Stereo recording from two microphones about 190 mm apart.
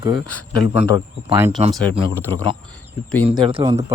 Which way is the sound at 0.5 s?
25° right (ahead or behind).